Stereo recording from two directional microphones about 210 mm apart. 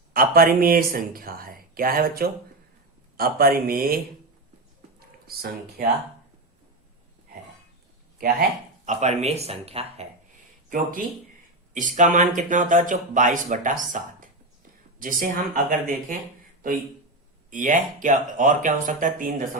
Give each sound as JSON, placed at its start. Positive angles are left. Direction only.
{"t": 0.1, "sound": "speech", "side_deg": -45}
{"t": 4.9, "sound": "a sound", "side_deg": -45}
{"t": 8.2, "sound": "speech", "side_deg": -40}
{"t": 10.7, "sound": "speech", "side_deg": -40}
{"t": 17.5, "sound": "speech", "side_deg": -40}